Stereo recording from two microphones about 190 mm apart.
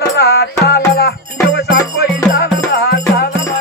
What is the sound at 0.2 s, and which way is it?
Music, 60° left (ahead or behind).